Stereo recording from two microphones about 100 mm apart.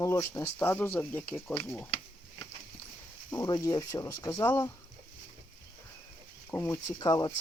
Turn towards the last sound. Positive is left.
turn(degrees=40)  # may be behind; listen again after turning